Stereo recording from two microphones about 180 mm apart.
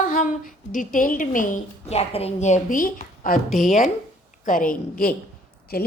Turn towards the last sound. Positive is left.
turn(degrees=55)  # may be behind; listen again after turning